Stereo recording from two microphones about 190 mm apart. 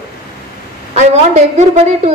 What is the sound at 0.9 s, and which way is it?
A man's voice, 35° right (ahead or behind).